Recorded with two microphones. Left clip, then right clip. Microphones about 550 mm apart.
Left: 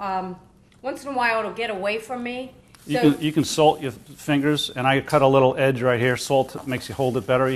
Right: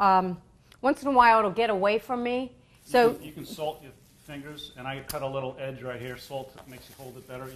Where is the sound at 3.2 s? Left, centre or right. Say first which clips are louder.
Left 16 dB; left.